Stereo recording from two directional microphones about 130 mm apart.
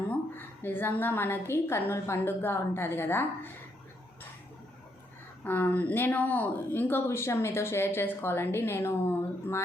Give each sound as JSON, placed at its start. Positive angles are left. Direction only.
{"t": 0.1, "sound": "speech", "side_deg": 15}
{"t": 5.5, "sound": "speech", "side_deg": 15}